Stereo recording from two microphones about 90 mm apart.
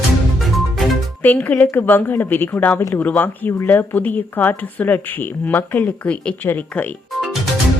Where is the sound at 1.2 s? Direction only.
20° left (ahead or behind).